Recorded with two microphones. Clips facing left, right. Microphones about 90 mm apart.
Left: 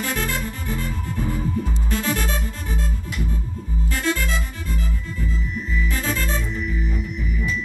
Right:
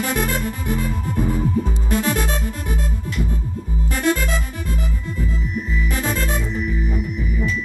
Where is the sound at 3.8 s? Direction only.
15° right (ahead or behind).